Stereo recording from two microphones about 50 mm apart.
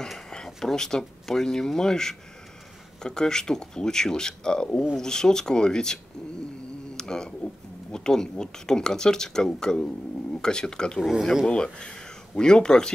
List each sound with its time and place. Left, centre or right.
0.5 s speech: centre
7.0 s speech: centre
11.0 s speech: centre
11.4 s speech: centre